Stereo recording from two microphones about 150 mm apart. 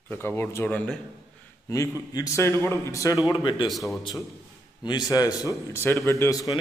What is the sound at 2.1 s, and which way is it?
Speech, 20° left (ahead or behind).